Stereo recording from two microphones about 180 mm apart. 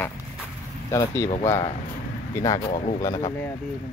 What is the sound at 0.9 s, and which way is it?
Speech, 15° left (ahead or behind).